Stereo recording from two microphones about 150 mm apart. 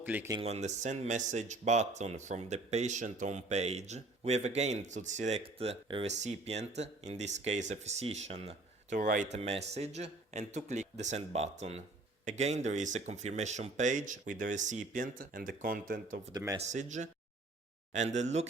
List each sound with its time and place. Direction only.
0.0 s speech: 10° right (ahead or behind)
0.3 s speech: 45° right (ahead or behind)
9.0 s speech: 60° right (ahead or behind)
16.6 s speech: 50° right (ahead or behind)